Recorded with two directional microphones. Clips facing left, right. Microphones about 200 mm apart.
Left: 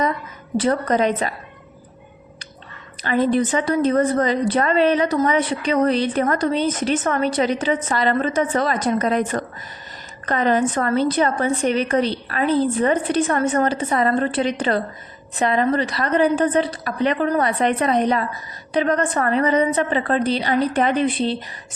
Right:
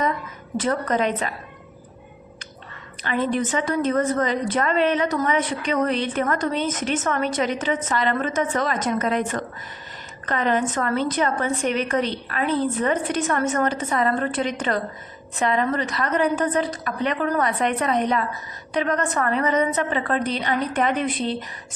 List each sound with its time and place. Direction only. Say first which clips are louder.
0.5 s a woman's voice: left 4 dB; 35° left (ahead or behind)
3.0 s a woman's voice: left 5 dB; 35° left (ahead or behind)